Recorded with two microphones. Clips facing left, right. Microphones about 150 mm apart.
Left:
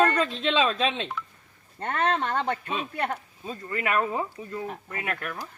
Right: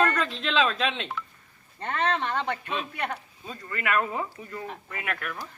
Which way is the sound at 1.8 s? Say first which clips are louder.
Left 1 dB; 45° left (ahead or behind).